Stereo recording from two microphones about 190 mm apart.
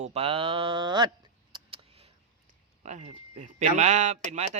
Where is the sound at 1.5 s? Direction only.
25° right (ahead or behind).